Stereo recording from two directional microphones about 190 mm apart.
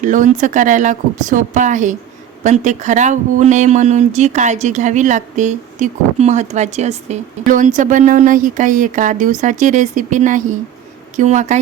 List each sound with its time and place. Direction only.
0.0 s speech: 40° right (ahead or behind)